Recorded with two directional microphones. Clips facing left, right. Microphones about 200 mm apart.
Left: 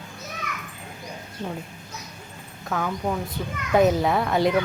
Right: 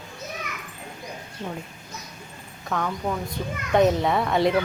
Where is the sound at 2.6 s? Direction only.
5° left (ahead or behind).